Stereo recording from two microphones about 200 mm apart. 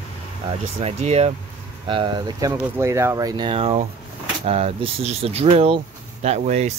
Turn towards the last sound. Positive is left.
turn(degrees=-35)  # may be behind; listen again after turning